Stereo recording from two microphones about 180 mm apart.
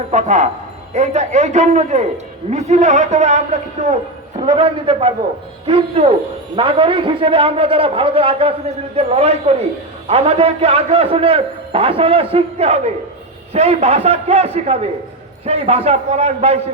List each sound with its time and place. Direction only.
0.1 s a man's voice: 40° right (ahead or behind)
4.4 s a man's voice: 30° right (ahead or behind)